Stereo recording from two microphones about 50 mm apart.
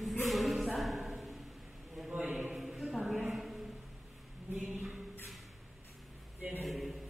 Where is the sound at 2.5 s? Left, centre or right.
Centre.